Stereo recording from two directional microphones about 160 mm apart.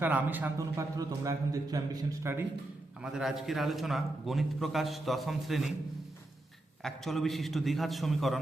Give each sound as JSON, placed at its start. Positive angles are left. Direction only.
{"t": 0.0, "sound": "a man's voice", "side_deg": -10}
{"t": 3.0, "sound": "a man's voice", "side_deg": -5}
{"t": 6.8, "sound": "a man's voice", "side_deg": 0}